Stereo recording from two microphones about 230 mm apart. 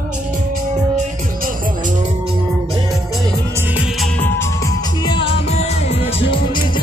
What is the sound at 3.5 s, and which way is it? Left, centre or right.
Music, centre.